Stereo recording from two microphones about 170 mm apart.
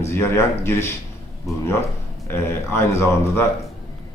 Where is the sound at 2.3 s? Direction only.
15° left (ahead or behind).